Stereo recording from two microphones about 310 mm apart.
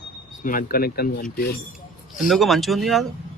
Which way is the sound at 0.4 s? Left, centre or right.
Left.